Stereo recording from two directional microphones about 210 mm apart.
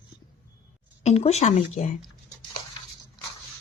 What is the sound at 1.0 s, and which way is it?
Speech, 30° left (ahead or behind).